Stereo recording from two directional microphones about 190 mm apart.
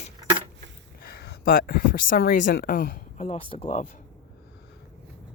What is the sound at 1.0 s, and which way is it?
Speech, 55° left (ahead or behind).